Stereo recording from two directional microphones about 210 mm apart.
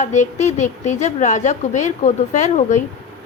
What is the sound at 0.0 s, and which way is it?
A woman's voice, 35° left (ahead or behind).